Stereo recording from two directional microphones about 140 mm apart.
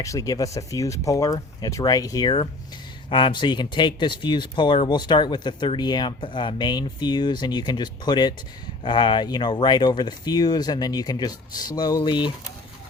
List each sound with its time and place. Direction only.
0.0 s speech: 25° left (ahead or behind)